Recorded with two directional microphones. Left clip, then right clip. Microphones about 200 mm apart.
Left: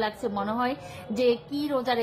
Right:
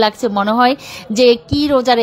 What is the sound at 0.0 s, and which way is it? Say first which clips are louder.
A woman's voice: right 14 dB; 40° right (ahead or behind).